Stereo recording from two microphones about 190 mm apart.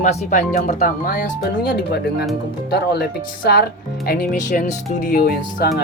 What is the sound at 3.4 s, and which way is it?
Speech, 55° left (ahead or behind).